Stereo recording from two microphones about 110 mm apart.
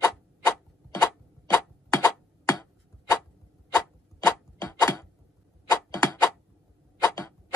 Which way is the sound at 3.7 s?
30° left (ahead or behind).